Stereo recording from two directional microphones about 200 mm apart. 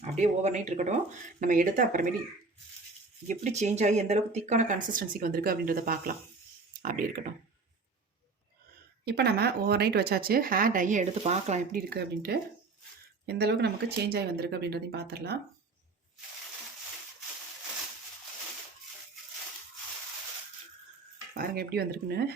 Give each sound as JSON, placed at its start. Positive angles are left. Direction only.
{"t": 0.0, "sound": "speech", "side_deg": -35}
{"t": 3.2, "sound": "speech", "side_deg": -35}
{"t": 9.0, "sound": "speech", "side_deg": -55}
{"t": 11.9, "sound": "speech", "side_deg": -55}
{"t": 21.3, "sound": "speech", "side_deg": -50}